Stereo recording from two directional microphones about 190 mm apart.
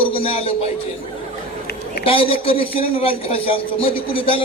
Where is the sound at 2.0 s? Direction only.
30° left (ahead or behind).